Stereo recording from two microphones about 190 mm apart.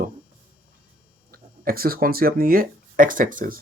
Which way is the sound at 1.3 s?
50° right (ahead or behind).